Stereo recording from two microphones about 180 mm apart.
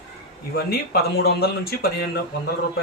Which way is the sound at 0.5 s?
60° left (ahead or behind).